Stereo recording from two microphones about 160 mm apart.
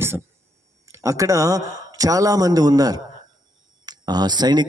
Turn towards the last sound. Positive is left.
turn(degrees=-25)  # may be behind; listen again after turning